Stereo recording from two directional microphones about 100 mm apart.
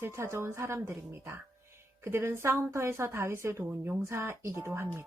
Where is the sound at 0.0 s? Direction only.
25° right (ahead or behind).